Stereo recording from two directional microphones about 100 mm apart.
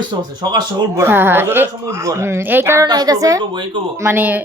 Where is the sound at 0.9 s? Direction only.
20° right (ahead or behind).